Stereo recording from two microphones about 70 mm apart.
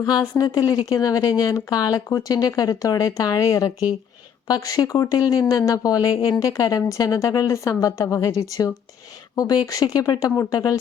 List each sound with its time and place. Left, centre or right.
0.0 s a woman's voice: left